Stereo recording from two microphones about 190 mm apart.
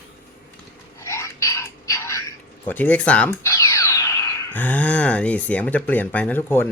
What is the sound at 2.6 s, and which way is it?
Speech, 10° left (ahead or behind).